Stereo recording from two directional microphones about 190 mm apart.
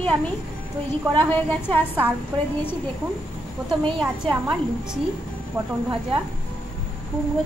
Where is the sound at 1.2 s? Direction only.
10° left (ahead or behind).